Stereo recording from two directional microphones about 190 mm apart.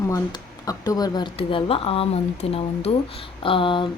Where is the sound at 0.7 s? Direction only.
20° left (ahead or behind).